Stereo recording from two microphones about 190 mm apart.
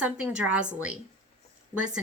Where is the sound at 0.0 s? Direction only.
5° right (ahead or behind).